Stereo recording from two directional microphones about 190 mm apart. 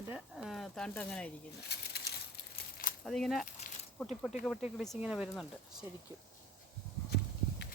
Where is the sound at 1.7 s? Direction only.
60° left (ahead or behind).